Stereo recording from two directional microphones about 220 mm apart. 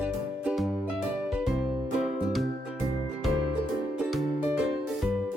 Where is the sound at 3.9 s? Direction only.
5° right (ahead or behind).